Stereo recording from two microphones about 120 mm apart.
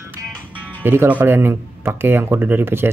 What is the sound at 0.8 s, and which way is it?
Speech, 20° right (ahead or behind).